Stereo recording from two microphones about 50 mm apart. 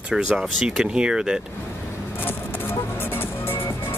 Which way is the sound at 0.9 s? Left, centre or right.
Centre.